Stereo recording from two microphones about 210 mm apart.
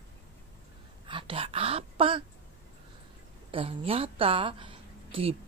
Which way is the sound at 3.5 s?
25° right (ahead or behind).